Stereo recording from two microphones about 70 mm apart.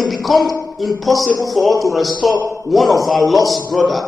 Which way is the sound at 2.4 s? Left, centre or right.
Left.